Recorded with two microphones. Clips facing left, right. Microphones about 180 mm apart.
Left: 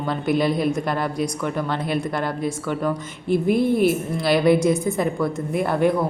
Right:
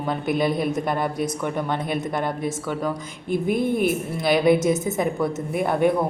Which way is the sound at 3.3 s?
50° right (ahead or behind).